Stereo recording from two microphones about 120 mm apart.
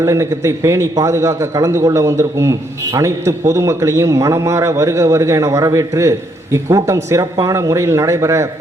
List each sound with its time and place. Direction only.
0.0 s a man's voice: 25° right (ahead or behind)